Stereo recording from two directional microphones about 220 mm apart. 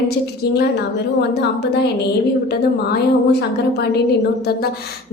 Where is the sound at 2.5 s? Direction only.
45° left (ahead or behind).